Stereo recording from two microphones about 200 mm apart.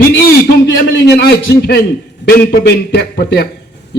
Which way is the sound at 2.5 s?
55° left (ahead or behind).